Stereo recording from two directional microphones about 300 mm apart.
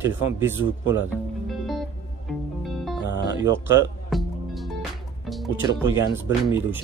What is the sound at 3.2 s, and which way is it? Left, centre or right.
Music, centre.